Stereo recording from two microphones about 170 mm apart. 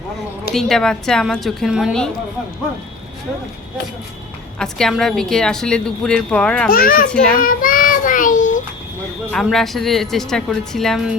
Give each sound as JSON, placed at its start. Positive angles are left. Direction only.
{"t": 0.5, "sound": "a woman's voice", "side_deg": 0}
{"t": 4.6, "sound": "a woman's voice", "side_deg": 5}
{"t": 6.7, "sound": "a child's voice", "side_deg": 60}
{"t": 7.3, "sound": "child singing", "side_deg": 55}
{"t": 9.3, "sound": "a woman's voice", "side_deg": 0}